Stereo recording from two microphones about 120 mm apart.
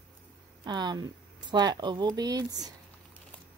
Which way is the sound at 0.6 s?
40° right (ahead or behind).